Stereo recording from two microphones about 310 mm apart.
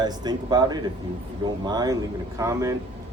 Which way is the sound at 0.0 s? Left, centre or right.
Centre.